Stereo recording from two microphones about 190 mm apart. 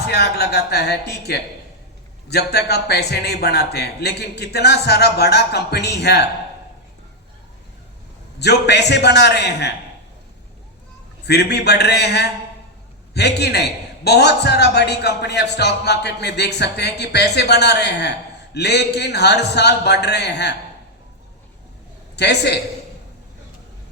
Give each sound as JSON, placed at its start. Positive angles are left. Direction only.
{"t": 0.1, "sound": "a man's voice", "side_deg": 60}
{"t": 8.4, "sound": "a man's voice", "side_deg": 60}
{"t": 11.3, "sound": "a man's voice", "side_deg": 60}
{"t": 22.1, "sound": "a man's voice", "side_deg": 60}